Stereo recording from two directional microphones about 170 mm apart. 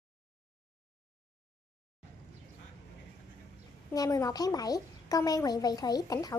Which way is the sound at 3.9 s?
20° left (ahead or behind).